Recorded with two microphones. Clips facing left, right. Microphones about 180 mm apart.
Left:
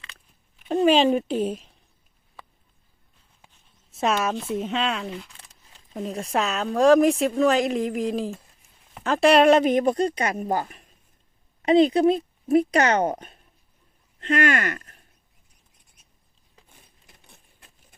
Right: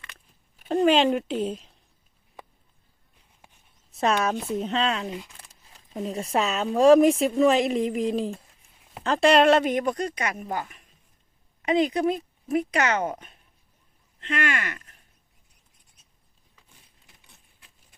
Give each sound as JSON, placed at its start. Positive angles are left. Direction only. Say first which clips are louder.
{"t": 0.7, "sound": "speech", "louder": "left 2 dB", "side_deg": 10}
{"t": 3.9, "sound": "a woman's voice", "louder": "even", "side_deg": 0}
{"t": 5.0, "sound": "speech", "louder": "even", "side_deg": -15}
{"t": 5.9, "sound": "a woman's voice", "louder": "even", "side_deg": 0}
{"t": 17.2, "sound": "keys jangling", "louder": "left 4 dB", "side_deg": 50}